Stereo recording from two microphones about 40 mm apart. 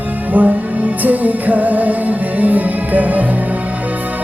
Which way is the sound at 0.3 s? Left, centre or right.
Right.